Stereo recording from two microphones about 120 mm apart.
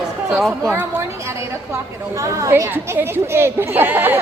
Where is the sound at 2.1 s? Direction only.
25° right (ahead or behind).